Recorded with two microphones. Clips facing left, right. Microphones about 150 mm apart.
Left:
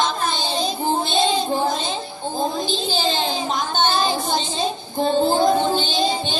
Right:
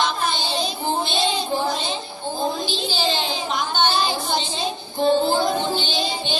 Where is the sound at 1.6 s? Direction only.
45° left (ahead or behind).